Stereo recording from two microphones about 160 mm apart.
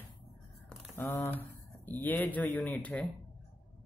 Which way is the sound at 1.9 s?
10° left (ahead or behind).